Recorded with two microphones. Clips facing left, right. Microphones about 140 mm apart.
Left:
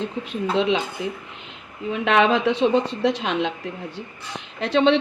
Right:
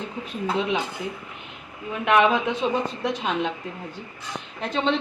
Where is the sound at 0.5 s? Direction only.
90° left.